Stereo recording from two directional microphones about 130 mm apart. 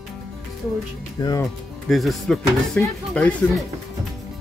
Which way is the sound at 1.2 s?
35° left (ahead or behind).